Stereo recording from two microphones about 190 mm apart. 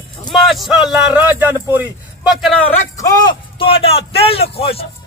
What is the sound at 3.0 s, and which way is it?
A man's voice, 20° left (ahead or behind).